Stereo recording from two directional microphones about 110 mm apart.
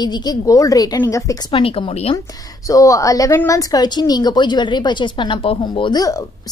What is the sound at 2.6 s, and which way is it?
A woman's voice, 30° left (ahead or behind).